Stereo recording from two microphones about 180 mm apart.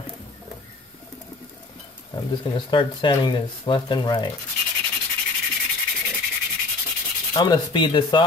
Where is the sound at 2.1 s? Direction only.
25° left (ahead or behind).